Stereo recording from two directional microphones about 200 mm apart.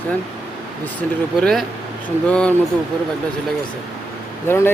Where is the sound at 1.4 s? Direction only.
5° left (ahead or behind).